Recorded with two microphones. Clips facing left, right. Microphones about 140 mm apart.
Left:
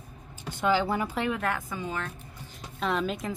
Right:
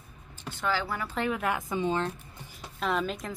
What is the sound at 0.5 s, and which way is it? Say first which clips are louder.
Speech: left 5 dB; 15° left (ahead or behind).